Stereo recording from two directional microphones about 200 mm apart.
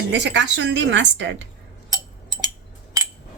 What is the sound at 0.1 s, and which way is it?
A woman's voice, 60° right (ahead or behind).